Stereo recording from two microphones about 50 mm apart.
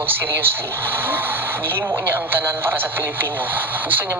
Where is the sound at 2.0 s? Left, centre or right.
Right.